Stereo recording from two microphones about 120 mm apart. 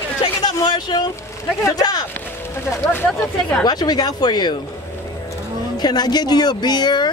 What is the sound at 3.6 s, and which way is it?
Speech, 35° left (ahead or behind).